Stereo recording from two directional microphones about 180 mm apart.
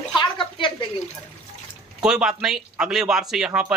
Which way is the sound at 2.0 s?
5° right (ahead or behind).